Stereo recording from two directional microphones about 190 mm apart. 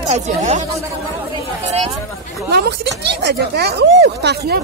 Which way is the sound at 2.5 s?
60° right (ahead or behind).